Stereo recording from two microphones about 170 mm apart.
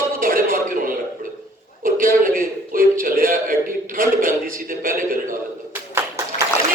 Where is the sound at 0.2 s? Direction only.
55° right (ahead or behind).